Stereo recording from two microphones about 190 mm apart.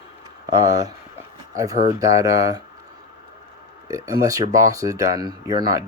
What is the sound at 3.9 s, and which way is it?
Speech, 15° right (ahead or behind).